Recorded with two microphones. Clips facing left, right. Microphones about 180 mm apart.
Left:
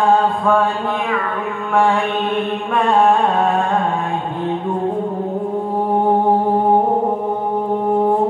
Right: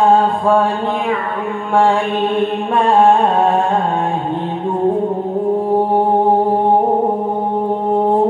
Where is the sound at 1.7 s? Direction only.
30° right (ahead or behind).